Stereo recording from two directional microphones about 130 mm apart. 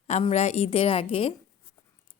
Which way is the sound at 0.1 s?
55° left (ahead or behind).